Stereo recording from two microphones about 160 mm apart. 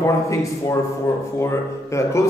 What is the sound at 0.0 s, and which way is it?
Speech, 20° left (ahead or behind).